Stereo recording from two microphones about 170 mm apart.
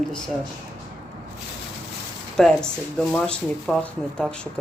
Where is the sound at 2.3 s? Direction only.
5° left (ahead or behind).